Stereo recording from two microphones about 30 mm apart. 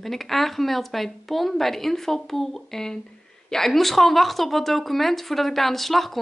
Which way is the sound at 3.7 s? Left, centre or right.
Centre.